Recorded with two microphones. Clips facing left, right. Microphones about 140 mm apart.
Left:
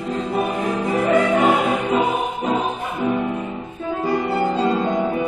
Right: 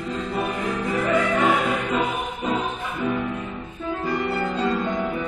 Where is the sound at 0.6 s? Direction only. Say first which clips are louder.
Left 4 dB; 30° left (ahead or behind).